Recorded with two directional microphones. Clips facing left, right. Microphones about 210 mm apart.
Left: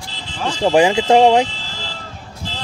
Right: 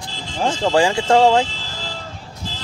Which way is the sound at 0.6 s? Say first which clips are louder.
Left 4 dB; 20° left (ahead or behind).